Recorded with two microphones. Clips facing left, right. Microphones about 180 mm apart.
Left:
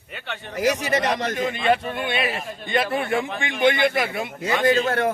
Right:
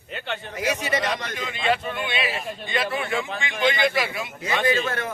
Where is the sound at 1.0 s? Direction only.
40° left (ahead or behind).